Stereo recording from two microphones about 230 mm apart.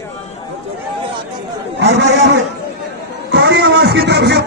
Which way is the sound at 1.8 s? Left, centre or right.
Right.